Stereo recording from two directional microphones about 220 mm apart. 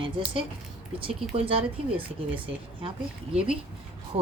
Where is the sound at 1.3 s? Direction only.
25° right (ahead or behind).